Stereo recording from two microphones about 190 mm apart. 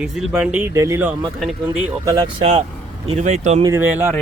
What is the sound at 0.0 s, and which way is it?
Speech, 5° right (ahead or behind).